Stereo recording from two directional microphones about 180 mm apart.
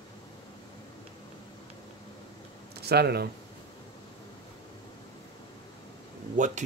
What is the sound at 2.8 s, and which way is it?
Speech, 65° right (ahead or behind).